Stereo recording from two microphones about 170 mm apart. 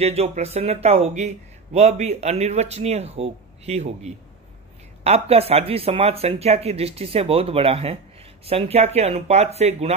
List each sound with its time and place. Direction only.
0.0 s speech: 40° right (ahead or behind)